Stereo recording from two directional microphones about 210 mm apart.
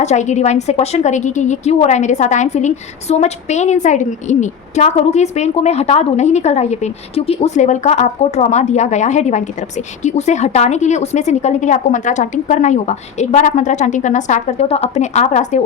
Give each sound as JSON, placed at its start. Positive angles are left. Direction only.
{"t": 0.0, "sound": "a woman's voice", "side_deg": 35}